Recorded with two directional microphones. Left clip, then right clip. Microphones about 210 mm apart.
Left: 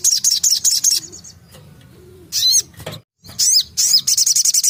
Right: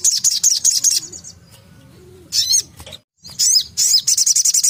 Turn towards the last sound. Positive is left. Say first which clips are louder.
# even
turn(degrees=20)  # may be behind; listen again after turning